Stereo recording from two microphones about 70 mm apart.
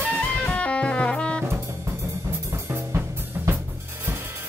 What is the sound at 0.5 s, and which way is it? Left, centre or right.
Music, centre.